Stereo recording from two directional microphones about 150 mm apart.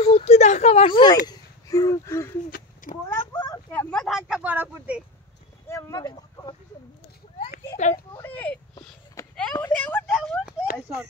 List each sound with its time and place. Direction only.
0.0 s speech: 45° left (ahead or behind)
1.2 s speech: 20° left (ahead or behind)
2.5 s a sound: 60° left (ahead or behind)
3.3 s a sound: 25° left (ahead or behind)
3.9 s speech: centre (ahead or behind)
5.7 s speech: 20° left (ahead or behind)
7.9 s speech: 25° left (ahead or behind)
8.3 s speech: 10° left (ahead or behind)
8.7 s a sound: 15° left (ahead or behind)
10.0 s speech: 5° left (ahead or behind)